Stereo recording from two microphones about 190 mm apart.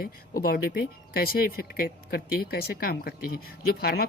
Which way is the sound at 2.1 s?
55° left (ahead or behind).